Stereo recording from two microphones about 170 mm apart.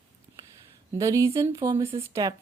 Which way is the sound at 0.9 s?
20° right (ahead or behind).